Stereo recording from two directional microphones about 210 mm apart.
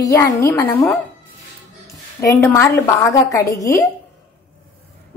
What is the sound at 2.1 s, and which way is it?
A woman's voice, 15° left (ahead or behind).